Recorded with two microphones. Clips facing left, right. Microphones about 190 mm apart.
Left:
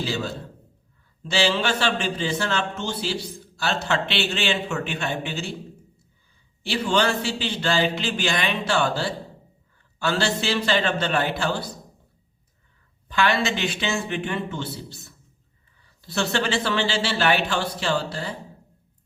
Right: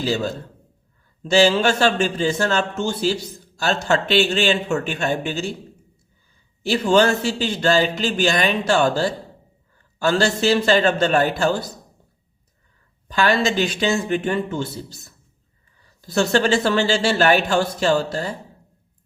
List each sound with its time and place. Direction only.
0.0 s a man's voice: 40° right (ahead or behind)
6.6 s a man's voice: 40° right (ahead or behind)
13.1 s a man's voice: 40° right (ahead or behind)